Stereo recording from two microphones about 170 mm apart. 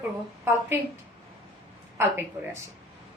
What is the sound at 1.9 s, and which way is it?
Speech, 15° right (ahead or behind).